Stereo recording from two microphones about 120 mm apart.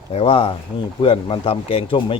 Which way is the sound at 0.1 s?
50° left (ahead or behind).